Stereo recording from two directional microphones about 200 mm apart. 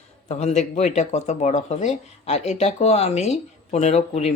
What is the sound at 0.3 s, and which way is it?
Speech, 35° left (ahead or behind).